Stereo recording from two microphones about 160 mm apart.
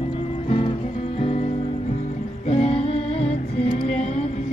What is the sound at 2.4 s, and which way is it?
Music, 45° left (ahead or behind).